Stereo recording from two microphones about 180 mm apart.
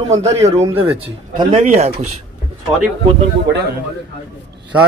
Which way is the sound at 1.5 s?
40° right (ahead or behind).